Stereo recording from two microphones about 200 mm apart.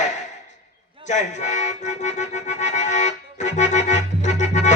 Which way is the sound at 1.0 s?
35° left (ahead or behind).